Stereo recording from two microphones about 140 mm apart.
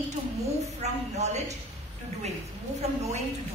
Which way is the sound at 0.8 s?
50° right (ahead or behind).